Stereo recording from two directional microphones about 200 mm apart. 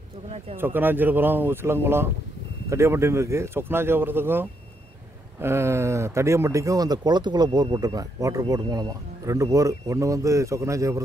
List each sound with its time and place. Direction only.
0.6 s speech: 10° right (ahead or behind)